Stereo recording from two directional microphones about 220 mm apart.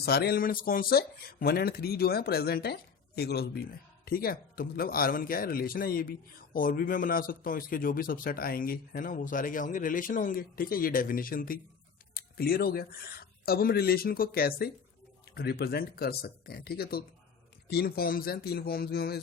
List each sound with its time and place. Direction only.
0.0 s speech: 45° left (ahead or behind)